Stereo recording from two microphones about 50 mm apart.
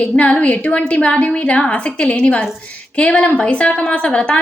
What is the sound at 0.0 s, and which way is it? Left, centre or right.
A woman's voice, left.